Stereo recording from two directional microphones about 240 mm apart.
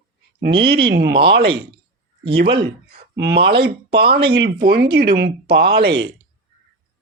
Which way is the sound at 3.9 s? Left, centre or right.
Right.